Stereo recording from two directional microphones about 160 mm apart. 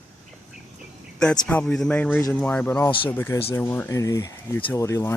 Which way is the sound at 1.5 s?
10° left (ahead or behind).